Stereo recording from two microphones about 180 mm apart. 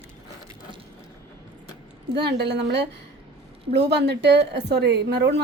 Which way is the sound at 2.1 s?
65° right (ahead or behind).